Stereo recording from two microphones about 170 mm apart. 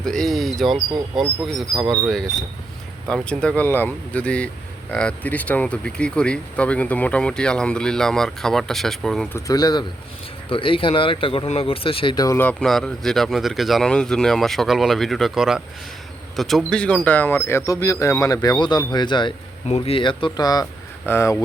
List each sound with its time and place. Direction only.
0.0 s speech: 5° left (ahead or behind)
9.3 s speech: 20° left (ahead or behind)